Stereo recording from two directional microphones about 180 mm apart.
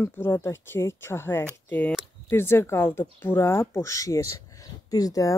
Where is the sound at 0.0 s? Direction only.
15° left (ahead or behind).